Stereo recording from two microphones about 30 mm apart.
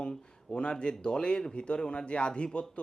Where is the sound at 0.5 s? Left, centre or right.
Left.